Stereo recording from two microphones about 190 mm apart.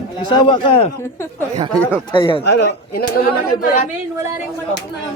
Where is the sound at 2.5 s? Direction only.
60° left (ahead or behind).